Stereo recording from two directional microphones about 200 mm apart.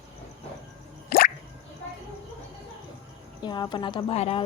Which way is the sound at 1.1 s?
45° left (ahead or behind).